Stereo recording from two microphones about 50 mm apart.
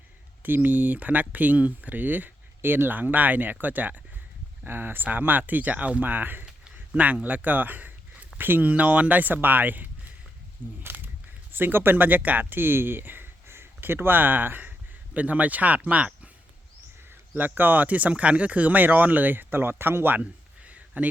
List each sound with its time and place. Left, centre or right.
0.4 s speech: right
4.6 s speech: right
6.7 s a sound: right
8.4 s speech: right
8.6 s speech: right
10.8 s a sound: right
11.5 s speech: right
15.1 s speech: right
17.3 s speech: right
20.1 s a sound: right